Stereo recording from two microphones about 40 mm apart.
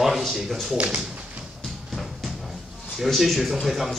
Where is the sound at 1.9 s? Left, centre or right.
Centre.